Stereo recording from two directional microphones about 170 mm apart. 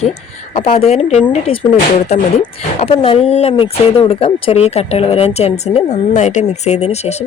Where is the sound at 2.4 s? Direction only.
35° left (ahead or behind).